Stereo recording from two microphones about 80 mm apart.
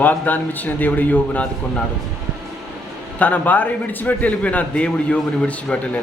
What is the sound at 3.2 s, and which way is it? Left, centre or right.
A man's voice, left.